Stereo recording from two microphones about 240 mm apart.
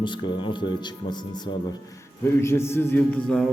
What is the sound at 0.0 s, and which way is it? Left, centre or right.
Speech, centre.